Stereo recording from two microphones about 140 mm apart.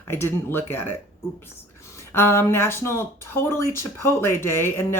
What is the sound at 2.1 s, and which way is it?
Speech, 15° left (ahead or behind).